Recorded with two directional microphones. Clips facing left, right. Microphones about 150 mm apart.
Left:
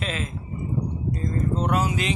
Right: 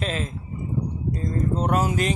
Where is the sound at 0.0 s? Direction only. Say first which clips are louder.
Right 2 dB; 35° right (ahead or behind).